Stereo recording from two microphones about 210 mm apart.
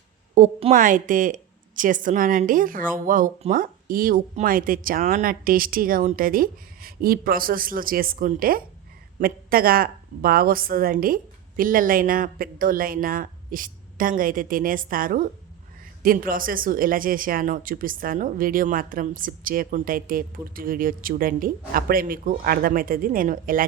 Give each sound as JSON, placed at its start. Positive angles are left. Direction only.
{"t": 0.3, "sound": "a woman's voice", "side_deg": -35}